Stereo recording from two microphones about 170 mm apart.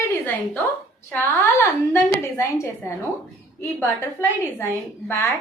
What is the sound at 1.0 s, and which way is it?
A woman's voice, 10° left (ahead or behind).